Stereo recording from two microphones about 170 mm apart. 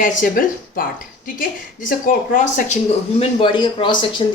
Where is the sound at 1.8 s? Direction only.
50° left (ahead or behind).